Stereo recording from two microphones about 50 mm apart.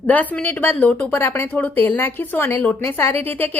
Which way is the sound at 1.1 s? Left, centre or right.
Left.